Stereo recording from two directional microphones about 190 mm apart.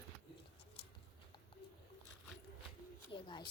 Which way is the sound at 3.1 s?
25° left (ahead or behind).